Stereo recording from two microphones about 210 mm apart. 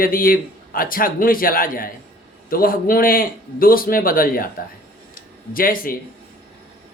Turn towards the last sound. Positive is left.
turn(degrees=45)  # may be behind; listen again after turning